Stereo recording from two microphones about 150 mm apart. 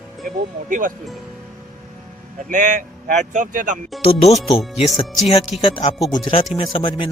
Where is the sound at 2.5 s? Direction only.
55° right (ahead or behind).